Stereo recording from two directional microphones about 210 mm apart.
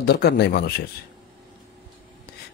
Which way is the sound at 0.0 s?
50° left (ahead or behind).